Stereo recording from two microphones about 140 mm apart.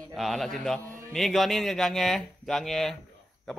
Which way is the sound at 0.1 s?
Centre (ahead or behind).